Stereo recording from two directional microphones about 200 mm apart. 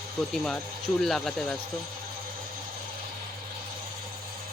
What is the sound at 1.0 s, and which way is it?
Speech, centre (ahead or behind).